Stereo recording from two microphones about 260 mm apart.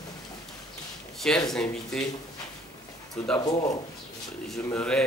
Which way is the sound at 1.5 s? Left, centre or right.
Centre.